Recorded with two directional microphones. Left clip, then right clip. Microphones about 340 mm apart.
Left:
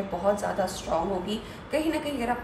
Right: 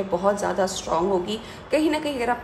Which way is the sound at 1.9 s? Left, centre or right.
Right.